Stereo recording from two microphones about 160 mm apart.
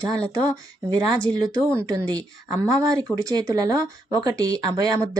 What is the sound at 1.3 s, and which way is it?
Speech, 20° right (ahead or behind).